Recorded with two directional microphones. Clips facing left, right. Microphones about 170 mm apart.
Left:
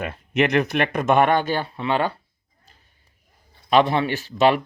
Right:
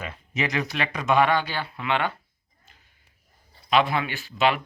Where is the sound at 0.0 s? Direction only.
60° left (ahead or behind).